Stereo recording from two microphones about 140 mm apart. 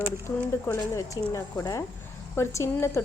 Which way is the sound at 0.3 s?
20° left (ahead or behind).